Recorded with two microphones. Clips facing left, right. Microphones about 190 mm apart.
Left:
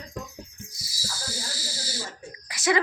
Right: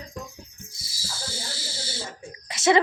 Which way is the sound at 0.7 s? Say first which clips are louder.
Even; 25° right (ahead or behind).